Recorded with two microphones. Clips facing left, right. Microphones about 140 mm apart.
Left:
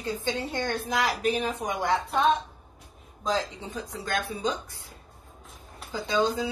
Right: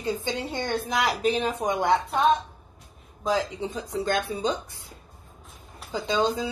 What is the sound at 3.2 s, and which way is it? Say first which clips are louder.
Speech: right 3 dB; 15° right (ahead or behind).